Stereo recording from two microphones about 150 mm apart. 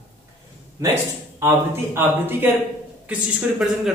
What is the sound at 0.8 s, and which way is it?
A man's voice, 20° right (ahead or behind).